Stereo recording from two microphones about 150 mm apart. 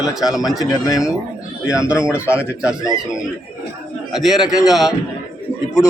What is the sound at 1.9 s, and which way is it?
Speech, 10° right (ahead or behind).